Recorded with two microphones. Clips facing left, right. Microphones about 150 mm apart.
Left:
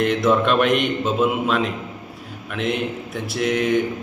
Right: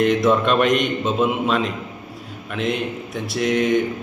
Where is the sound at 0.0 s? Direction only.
Centre (ahead or behind).